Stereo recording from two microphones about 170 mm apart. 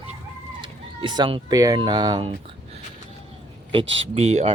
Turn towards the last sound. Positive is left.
turn(degrees=-40)  # may be behind; listen again after turning